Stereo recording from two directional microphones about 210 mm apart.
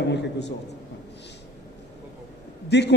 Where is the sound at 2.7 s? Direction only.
55° left (ahead or behind).